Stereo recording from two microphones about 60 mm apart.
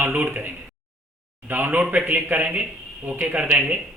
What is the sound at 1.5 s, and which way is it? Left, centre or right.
Speech, right.